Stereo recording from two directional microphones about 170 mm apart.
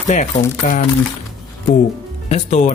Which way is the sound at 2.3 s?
45° left (ahead or behind).